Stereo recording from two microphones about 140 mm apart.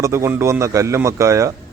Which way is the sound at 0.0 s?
20° right (ahead or behind).